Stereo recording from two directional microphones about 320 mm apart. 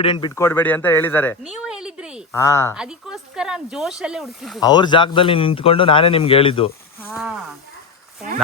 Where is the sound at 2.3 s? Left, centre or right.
Centre.